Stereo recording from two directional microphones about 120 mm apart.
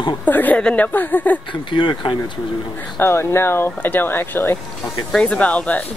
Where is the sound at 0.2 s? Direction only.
15° left (ahead or behind).